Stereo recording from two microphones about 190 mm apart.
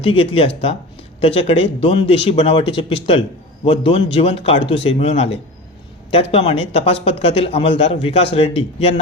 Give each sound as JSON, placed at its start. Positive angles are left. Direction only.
{"t": 0.0, "sound": "speech", "side_deg": 30}